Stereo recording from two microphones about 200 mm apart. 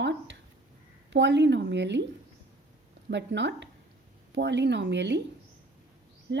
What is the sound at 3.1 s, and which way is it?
A woman's voice, 60° right (ahead or behind).